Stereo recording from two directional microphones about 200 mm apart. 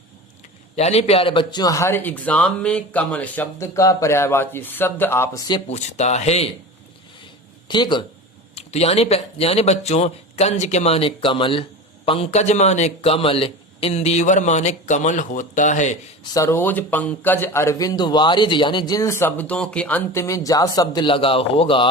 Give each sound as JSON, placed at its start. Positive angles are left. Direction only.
{"t": 0.8, "sound": "speech", "side_deg": 30}
{"t": 7.7, "sound": "a man's voice", "side_deg": 20}
{"t": 16.2, "sound": "speech", "side_deg": 15}